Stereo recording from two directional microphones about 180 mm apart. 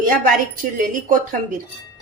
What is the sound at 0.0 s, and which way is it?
Speech, 50° right (ahead or behind).